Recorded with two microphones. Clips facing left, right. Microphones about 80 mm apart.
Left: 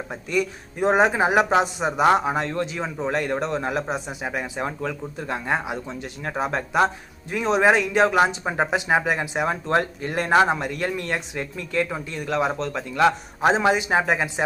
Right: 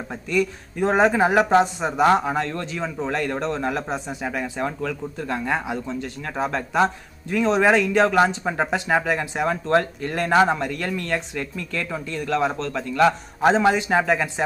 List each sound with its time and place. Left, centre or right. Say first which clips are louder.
0.1 s speech: right 2 dB; centre